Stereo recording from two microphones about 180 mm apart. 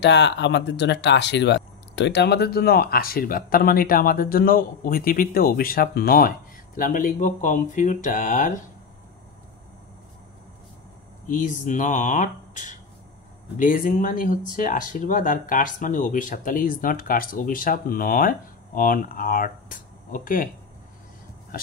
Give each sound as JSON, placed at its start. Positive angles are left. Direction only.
{"t": 0.0, "sound": "speech", "side_deg": 75}
{"t": 11.2, "sound": "speech", "side_deg": 45}